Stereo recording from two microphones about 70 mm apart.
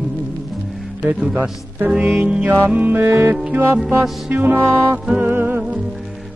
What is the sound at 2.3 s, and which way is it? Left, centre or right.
Music, right.